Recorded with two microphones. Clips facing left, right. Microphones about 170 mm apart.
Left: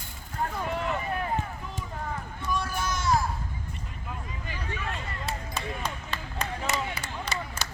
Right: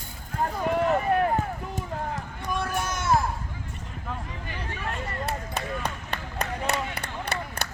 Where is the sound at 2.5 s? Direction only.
60° right (ahead or behind).